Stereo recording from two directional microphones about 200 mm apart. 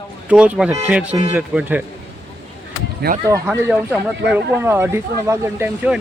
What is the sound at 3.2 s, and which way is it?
Speech, 15° right (ahead or behind).